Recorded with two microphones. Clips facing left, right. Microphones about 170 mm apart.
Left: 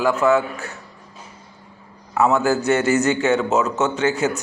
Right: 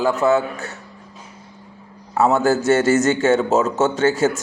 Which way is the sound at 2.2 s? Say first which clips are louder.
Right 1 dB; 40° right (ahead or behind).